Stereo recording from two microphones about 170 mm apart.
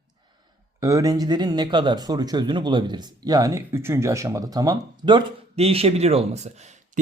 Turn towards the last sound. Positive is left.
turn(degrees=-40)  # may be behind; listen again after turning